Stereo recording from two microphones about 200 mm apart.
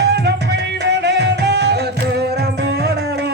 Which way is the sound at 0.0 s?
55° right (ahead or behind).